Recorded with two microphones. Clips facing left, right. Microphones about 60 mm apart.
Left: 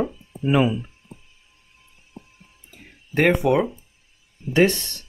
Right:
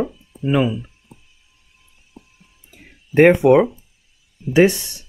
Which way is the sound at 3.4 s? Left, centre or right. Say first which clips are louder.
Right 7 dB; right.